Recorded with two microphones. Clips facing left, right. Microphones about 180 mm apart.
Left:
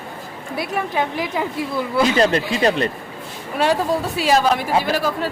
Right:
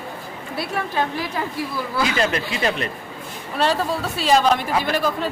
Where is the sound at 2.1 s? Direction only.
35° left (ahead or behind).